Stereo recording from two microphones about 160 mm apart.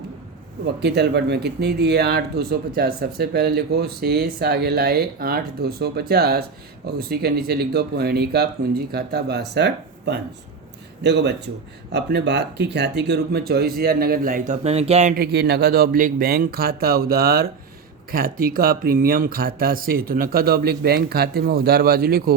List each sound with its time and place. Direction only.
0.8 s speech: 90° right; by 15.1 s 40° right (ahead or behind)
15.1 s speech: 85° right